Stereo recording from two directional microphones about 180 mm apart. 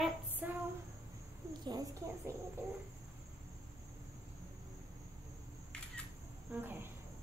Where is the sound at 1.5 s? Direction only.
25° right (ahead or behind).